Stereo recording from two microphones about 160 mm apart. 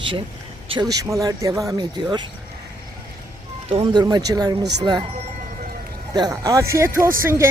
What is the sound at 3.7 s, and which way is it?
Speech, 35° right (ahead or behind).